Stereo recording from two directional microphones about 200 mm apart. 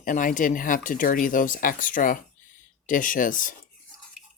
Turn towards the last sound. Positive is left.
turn(degrees=40)  # may be behind; listen again after turning